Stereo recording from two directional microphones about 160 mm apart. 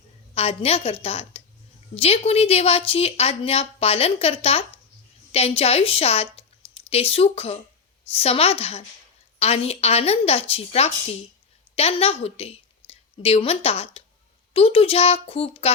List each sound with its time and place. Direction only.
0.3 s a woman's voice: 40° left (ahead or behind)